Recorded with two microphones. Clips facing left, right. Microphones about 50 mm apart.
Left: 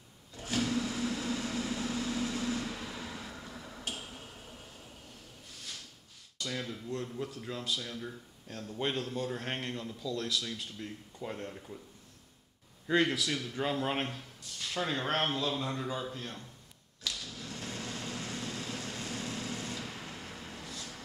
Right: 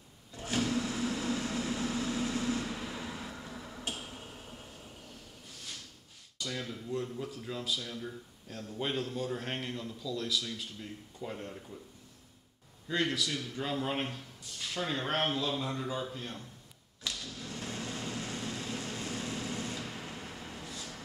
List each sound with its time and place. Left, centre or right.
0.3 s vehicle: centre
3.9 s a sound: centre
6.4 s speech: centre
12.9 s a man's voice: centre
13.6 s speech: left
14.0 s speech: centre
17.1 s a sound: centre
17.6 s vehicle: centre